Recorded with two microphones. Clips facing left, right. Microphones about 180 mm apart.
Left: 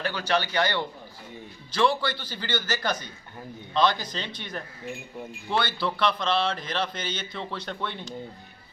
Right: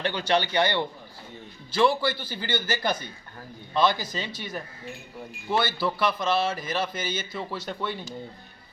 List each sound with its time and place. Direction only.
0.0 s a man's voice: 25° right (ahead or behind)
0.3 s a man's voice: 15° right (ahead or behind)